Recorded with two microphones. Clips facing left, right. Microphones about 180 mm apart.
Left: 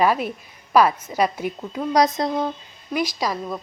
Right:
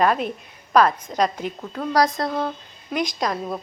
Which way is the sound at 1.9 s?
20° left (ahead or behind).